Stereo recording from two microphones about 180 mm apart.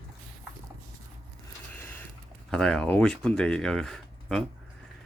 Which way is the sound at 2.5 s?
5° left (ahead or behind).